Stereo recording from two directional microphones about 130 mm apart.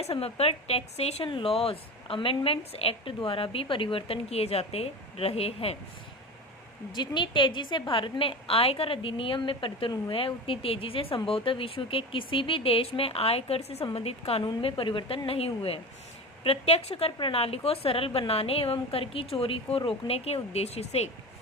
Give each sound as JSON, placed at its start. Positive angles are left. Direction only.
{"t": 0.0, "sound": "speech", "side_deg": 50}
{"t": 6.9, "sound": "speech", "side_deg": 35}